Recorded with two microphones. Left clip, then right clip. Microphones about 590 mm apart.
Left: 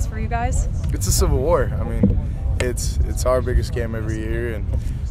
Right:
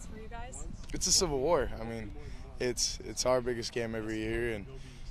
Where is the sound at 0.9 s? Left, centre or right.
Right.